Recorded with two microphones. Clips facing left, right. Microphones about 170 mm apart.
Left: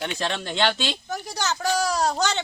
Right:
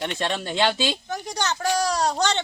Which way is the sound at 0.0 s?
Centre (ahead or behind).